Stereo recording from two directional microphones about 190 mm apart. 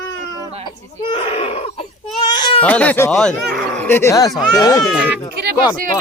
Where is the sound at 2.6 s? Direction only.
10° left (ahead or behind).